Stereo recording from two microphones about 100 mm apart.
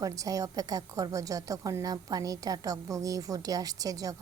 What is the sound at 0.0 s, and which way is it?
A woman's voice, 35° right (ahead or behind).